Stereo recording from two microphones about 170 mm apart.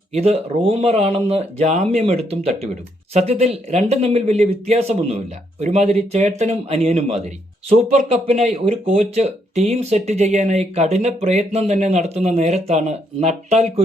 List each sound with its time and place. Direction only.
0.1 s speech: 40° right (ahead or behind)